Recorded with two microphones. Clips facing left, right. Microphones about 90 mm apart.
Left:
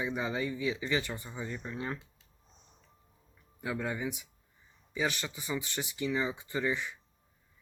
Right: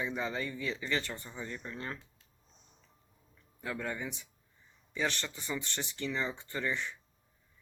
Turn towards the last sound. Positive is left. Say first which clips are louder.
# left 3 dB
turn(degrees=10)  # may be behind; listen again after turning